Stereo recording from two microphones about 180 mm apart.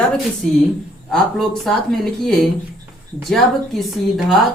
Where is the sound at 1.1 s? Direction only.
Centre (ahead or behind).